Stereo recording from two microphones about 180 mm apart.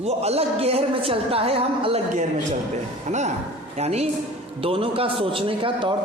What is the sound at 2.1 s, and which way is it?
A man's voice, 45° right (ahead or behind).